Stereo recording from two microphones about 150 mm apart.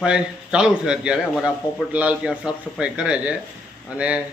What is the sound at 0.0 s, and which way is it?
A man's voice, 5° right (ahead or behind).